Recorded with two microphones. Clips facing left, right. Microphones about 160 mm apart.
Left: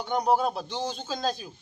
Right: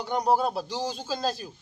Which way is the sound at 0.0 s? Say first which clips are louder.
Even; 5° right (ahead or behind).